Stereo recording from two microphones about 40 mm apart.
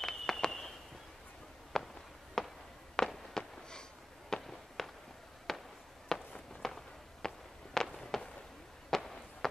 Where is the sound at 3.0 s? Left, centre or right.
Centre.